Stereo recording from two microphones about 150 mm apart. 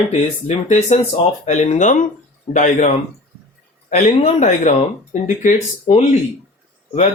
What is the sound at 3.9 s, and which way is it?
Speech, 50° left (ahead or behind).